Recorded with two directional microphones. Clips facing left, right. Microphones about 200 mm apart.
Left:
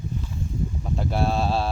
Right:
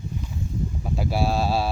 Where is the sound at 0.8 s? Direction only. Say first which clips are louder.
Right 1 dB; 5° right (ahead or behind).